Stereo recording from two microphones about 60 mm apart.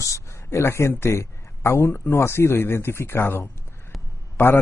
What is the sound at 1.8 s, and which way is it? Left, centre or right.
A man's voice, left.